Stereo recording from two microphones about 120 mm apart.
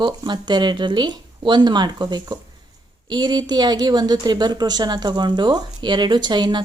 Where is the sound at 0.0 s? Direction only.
40° right (ahead or behind).